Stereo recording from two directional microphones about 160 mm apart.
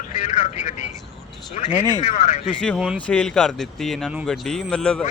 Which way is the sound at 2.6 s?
5° left (ahead or behind).